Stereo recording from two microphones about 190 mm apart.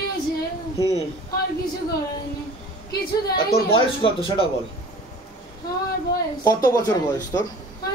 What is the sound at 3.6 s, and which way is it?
Speech, 30° left (ahead or behind).